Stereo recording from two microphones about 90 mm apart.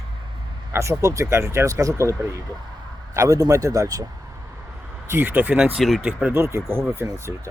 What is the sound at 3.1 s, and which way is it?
Speech, 40° right (ahead or behind).